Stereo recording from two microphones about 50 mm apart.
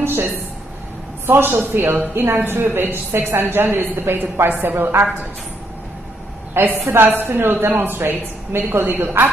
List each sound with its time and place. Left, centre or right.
0.0 s a woman's voice: right
6.5 s a woman's voice: right
7.8 s a woman's voice: right